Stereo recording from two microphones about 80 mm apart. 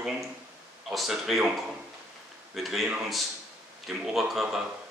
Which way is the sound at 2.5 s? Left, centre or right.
Centre.